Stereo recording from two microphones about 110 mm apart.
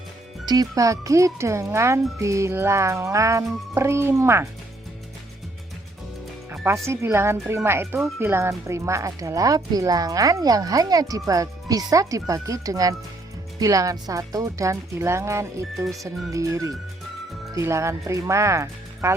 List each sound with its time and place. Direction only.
0.4 s a child's voice: 35° right (ahead or behind)
6.8 s a child's voice: 25° right (ahead or behind)